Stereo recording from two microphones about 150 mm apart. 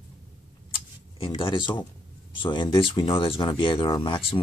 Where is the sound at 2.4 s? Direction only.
35° left (ahead or behind).